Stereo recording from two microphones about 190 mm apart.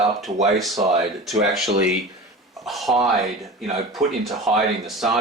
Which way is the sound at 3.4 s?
35° right (ahead or behind).